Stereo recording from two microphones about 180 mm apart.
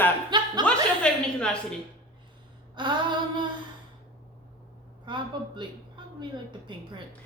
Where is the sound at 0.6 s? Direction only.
5° left (ahead or behind).